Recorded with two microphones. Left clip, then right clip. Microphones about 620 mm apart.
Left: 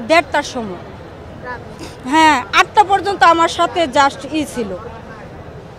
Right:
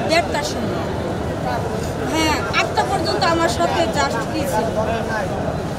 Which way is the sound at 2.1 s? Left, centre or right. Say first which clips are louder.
Left 9 dB; left.